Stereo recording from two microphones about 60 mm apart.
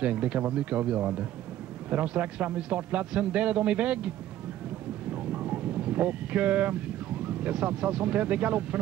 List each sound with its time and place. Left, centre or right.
0.0 s a man's voice: right
5.1 s boat: right
7.2 s a man's voice: centre